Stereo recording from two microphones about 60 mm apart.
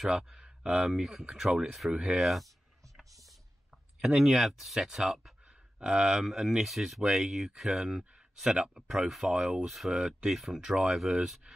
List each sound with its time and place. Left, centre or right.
0.1 s speech: centre
4.0 s speech: centre
5.8 s speech: centre
9.7 s speech: centre